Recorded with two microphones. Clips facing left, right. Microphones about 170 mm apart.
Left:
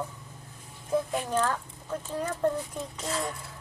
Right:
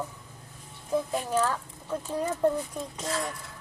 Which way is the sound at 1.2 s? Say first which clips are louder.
Right 1 dB; 5° right (ahead or behind).